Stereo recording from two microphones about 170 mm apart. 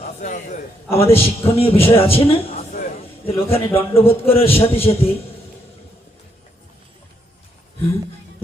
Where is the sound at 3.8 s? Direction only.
35° left (ahead or behind).